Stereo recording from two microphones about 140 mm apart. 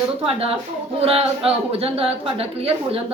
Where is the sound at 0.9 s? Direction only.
45° right (ahead or behind).